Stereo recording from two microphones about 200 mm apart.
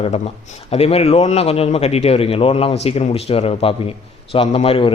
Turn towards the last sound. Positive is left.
turn(degrees=30)  # may be behind; listen again after turning